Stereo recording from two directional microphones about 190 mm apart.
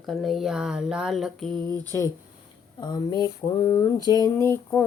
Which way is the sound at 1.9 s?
10° left (ahead or behind).